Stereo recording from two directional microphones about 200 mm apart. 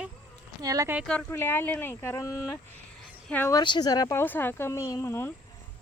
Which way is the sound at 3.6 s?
20° left (ahead or behind).